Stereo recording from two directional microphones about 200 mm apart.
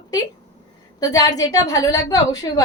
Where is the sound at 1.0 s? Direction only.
20° left (ahead or behind).